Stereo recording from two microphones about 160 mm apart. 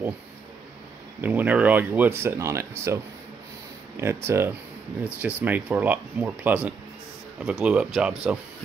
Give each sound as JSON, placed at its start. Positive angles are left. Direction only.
{"t": 1.2, "sound": "speech", "side_deg": -10}